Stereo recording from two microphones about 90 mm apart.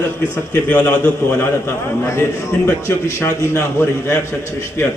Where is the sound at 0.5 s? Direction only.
20° left (ahead or behind).